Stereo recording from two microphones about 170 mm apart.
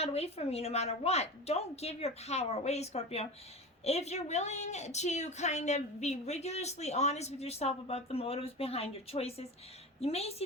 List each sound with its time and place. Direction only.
0.0 s a woman's voice: 35° left (ahead or behind)